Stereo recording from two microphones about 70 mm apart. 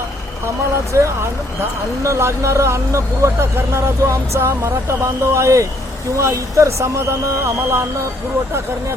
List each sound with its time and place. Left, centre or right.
0.9 s speech: right
4.4 s speech: right
7.4 s music: right